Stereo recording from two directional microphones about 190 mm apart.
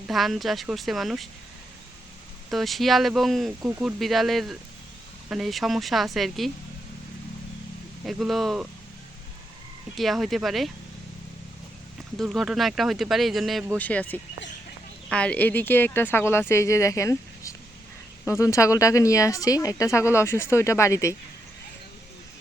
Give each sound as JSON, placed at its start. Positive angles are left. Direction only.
{"t": 0.1, "sound": "speech", "side_deg": 0}
{"t": 2.5, "sound": "speech", "side_deg": 0}
{"t": 8.0, "sound": "speech", "side_deg": 0}
{"t": 9.9, "sound": "speech", "side_deg": 0}
{"t": 12.1, "sound": "speech", "side_deg": 0}